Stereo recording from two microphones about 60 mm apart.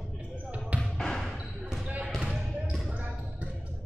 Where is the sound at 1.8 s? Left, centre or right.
Right.